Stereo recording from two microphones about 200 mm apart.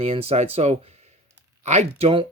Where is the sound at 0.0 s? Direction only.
30° right (ahead or behind).